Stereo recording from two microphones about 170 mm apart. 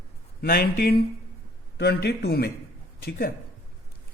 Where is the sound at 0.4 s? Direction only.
60° left (ahead or behind).